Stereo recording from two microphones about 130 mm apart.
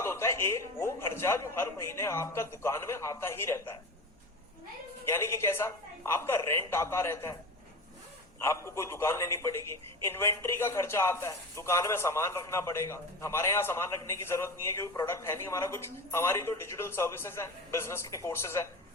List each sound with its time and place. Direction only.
0.0 s a man's voice: 20° left (ahead or behind)
5.0 s a man's voice: 20° left (ahead or behind)
8.4 s a man's voice: 20° left (ahead or behind)